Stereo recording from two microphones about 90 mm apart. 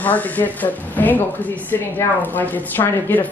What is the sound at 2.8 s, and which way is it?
Speech, 30° left (ahead or behind).